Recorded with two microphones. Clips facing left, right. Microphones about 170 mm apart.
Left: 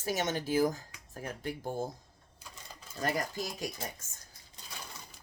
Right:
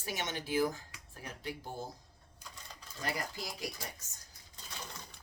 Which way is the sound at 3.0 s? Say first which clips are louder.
Left 6 dB; 45° left (ahead or behind).